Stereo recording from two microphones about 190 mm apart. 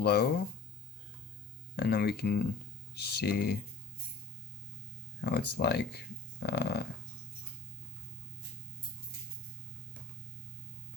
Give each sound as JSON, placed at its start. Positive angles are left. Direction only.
{"t": 0.0, "sound": "speech", "side_deg": 55}
{"t": 1.7, "sound": "speech", "side_deg": 55}
{"t": 5.2, "sound": "speech", "side_deg": 55}